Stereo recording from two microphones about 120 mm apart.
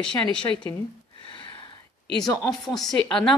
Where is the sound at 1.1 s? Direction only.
40° left (ahead or behind).